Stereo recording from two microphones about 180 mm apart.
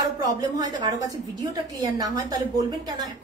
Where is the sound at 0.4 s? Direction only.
20° right (ahead or behind).